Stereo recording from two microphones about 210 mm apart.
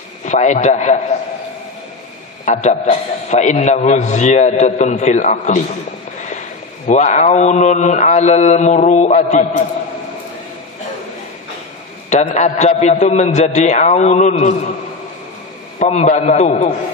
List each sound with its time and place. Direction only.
0.2 s a man's voice: 35° left (ahead or behind)
2.4 s a man's voice: 35° left (ahead or behind)
6.1 s a sound: 35° left (ahead or behind)
6.9 s a man's voice: 35° left (ahead or behind)
12.1 s a man's voice: 35° left (ahead or behind)
15.8 s a man's voice: 35° left (ahead or behind)